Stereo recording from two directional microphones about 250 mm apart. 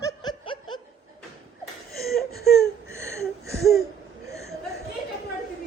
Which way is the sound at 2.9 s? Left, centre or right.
Right.